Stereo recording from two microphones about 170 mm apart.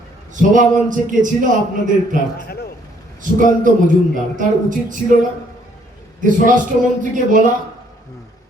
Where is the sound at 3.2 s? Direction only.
50° right (ahead or behind).